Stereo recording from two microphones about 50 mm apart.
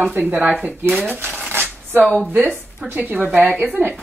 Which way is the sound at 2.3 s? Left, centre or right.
Right.